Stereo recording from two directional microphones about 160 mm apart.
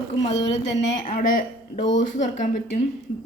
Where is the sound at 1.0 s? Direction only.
55° left (ahead or behind).